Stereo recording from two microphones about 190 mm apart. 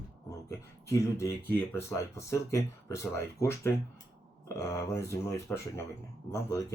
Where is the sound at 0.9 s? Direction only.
15° left (ahead or behind).